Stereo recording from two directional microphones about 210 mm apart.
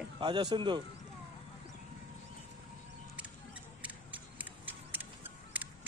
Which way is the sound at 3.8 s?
5° right (ahead or behind).